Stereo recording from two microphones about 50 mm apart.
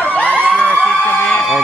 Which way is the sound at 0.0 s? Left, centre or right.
Left.